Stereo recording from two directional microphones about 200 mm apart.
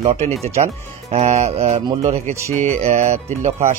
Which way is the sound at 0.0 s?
30° right (ahead or behind).